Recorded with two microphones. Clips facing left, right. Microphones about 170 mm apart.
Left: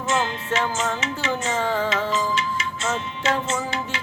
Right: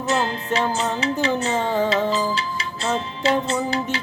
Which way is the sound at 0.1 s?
35° right (ahead or behind).